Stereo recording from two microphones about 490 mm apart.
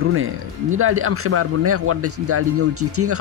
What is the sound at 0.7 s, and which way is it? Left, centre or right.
Speech, right.